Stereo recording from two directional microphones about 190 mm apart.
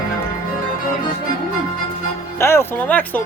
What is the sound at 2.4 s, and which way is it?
Speech, 15° left (ahead or behind).